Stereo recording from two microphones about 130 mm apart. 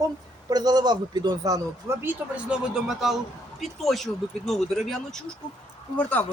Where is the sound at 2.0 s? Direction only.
5° right (ahead or behind).